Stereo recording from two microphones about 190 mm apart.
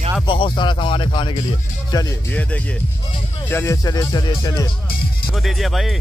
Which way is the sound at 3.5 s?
15° left (ahead or behind).